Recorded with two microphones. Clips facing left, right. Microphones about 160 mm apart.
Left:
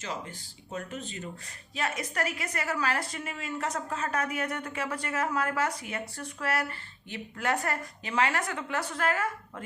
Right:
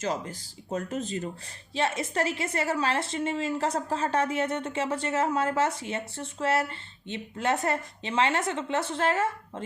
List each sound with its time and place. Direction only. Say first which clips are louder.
0.0 s speech: right 7 dB; 40° right (ahead or behind)
1.7 s a woman's voice: right 5 dB; 25° right (ahead or behind)